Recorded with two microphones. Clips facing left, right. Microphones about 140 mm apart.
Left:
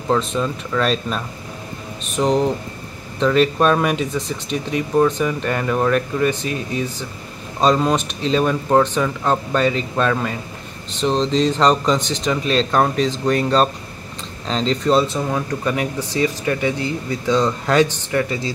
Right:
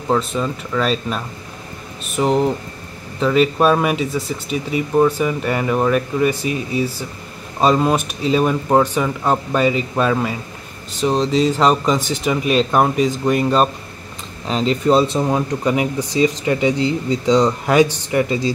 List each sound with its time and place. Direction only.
0.1 s speech: 5° right (ahead or behind)